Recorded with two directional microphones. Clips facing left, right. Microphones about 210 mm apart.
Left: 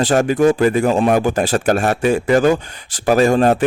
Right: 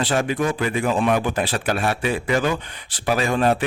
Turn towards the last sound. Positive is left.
turn(degrees=45)  # may be behind; listen again after turning